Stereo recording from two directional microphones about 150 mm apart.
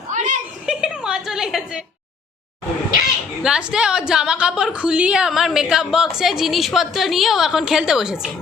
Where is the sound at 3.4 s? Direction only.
5° right (ahead or behind).